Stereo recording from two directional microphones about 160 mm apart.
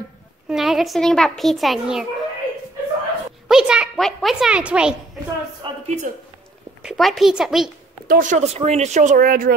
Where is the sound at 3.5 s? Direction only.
5° right (ahead or behind).